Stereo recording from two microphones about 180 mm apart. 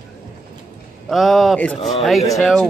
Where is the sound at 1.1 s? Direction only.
Centre (ahead or behind).